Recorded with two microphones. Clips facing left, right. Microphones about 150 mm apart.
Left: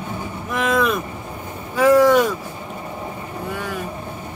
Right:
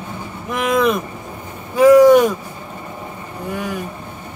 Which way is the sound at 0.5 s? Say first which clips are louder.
Right 3 dB; 15° right (ahead or behind).